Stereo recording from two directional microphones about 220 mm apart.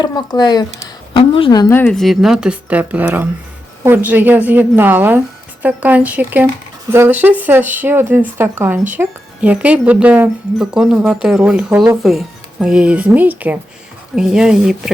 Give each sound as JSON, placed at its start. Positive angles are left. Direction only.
{"t": 0.0, "sound": "speech", "side_deg": 20}